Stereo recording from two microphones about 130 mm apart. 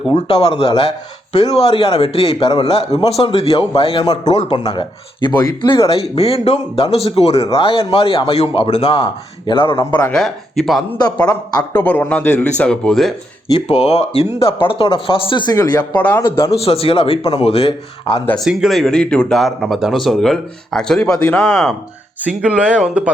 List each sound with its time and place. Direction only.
0.1 s speech: 45° left (ahead or behind)
5.7 s speech: 50° left (ahead or behind)
10.1 s speech: 5° left (ahead or behind)
11.7 s speech: 15° left (ahead or behind)
13.7 s speech: 50° left (ahead or behind)
15.5 s speech: 30° left (ahead or behind)
16.0 s speech: 10° left (ahead or behind)
16.6 s speech: 45° left (ahead or behind)
18.4 s speech: centre (ahead or behind)